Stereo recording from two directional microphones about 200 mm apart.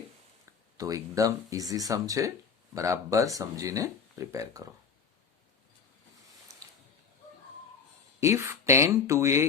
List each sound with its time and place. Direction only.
0.8 s speech: 15° right (ahead or behind)
8.2 s speech: 15° right (ahead or behind)